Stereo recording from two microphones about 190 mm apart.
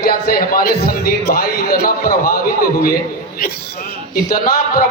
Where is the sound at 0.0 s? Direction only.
50° left (ahead or behind).